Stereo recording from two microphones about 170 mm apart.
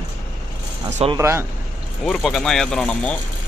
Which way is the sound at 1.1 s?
15° right (ahead or behind).